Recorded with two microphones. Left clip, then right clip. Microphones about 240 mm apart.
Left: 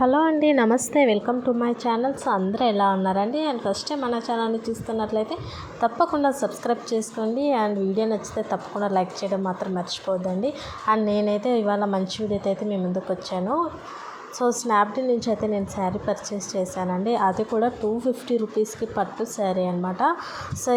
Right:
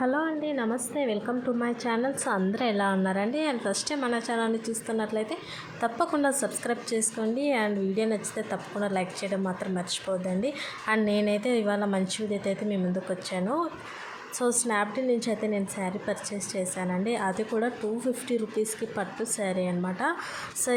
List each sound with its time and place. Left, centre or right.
0.0 s a woman's voice: centre
1.3 s a woman's voice: centre
14.7 s a woman's voice: centre